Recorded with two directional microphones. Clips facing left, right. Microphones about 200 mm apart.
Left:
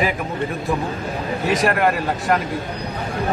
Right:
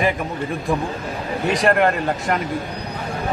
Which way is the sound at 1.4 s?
Centre (ahead or behind).